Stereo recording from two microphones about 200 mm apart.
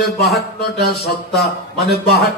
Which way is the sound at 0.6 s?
50° left (ahead or behind).